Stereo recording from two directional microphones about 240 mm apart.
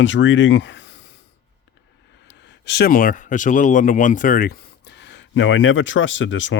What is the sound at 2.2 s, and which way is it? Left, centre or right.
Speech, left.